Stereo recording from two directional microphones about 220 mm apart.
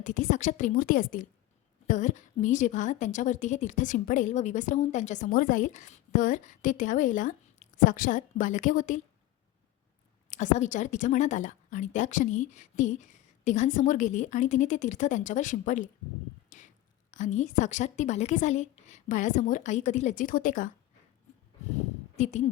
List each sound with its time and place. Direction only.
0.0 s a woman's voice: 35° left (ahead or behind)
10.2 s a woman's voice: 35° left (ahead or behind)
22.1 s a woman's voice: 35° left (ahead or behind)